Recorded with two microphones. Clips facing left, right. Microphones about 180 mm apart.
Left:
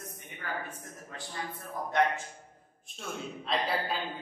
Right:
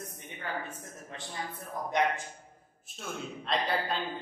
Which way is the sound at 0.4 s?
25° right (ahead or behind).